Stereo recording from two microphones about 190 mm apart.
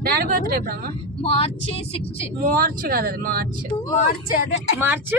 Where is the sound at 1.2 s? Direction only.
30° left (ahead or behind).